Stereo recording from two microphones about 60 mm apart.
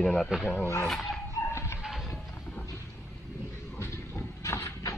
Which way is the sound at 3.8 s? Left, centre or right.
Left.